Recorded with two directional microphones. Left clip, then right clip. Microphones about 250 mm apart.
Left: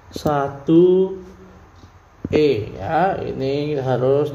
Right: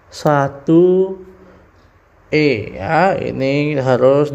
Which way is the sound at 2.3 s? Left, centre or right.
Right.